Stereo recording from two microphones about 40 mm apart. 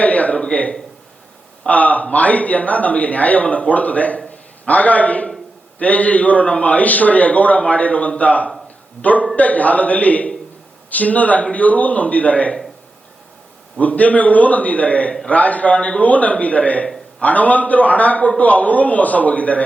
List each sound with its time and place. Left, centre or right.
0.0 s a sound: left
1.6 s a man's voice: left
13.7 s a man's voice: left